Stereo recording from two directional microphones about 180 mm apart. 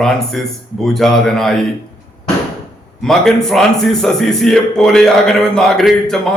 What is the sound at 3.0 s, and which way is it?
A man's voice, centre (ahead or behind).